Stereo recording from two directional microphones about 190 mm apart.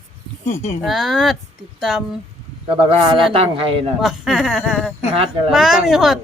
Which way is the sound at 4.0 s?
Centre (ahead or behind).